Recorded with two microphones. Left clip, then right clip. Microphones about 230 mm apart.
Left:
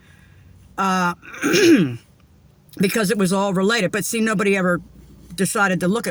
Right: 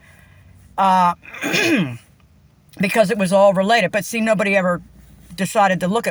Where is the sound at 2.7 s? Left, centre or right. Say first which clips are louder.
Right 4 dB; centre.